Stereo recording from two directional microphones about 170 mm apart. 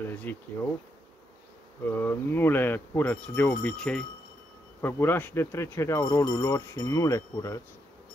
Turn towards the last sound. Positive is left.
turn(degrees=20)  # may be behind; listen again after turning